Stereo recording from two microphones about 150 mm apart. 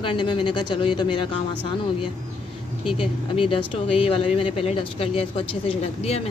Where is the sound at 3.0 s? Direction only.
35° left (ahead or behind).